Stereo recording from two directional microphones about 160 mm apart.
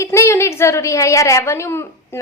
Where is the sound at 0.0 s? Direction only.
15° left (ahead or behind).